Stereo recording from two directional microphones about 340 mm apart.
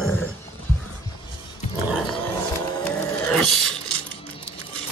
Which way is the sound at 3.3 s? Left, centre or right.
Centre.